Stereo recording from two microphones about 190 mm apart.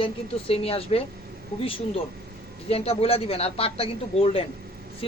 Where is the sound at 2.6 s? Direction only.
30° left (ahead or behind).